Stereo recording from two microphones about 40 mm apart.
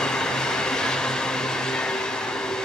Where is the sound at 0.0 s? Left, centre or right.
Centre.